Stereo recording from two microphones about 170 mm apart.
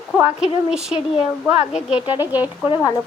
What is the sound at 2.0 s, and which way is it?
Speech, 30° left (ahead or behind).